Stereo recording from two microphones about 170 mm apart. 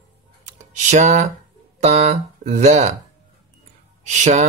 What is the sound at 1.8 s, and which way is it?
Speech, 40° right (ahead or behind).